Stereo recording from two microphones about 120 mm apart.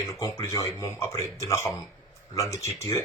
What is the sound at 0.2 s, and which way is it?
Speech, 25° left (ahead or behind).